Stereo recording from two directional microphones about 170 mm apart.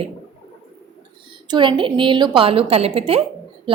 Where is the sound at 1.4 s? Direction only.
30° right (ahead or behind).